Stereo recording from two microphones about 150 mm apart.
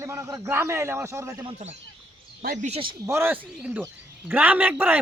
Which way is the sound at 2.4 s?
55° right (ahead or behind).